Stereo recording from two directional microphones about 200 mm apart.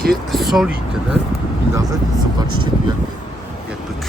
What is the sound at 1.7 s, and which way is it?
Speech, 15° right (ahead or behind).